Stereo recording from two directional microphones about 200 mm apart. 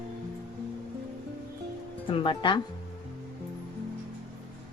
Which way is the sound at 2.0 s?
25° left (ahead or behind).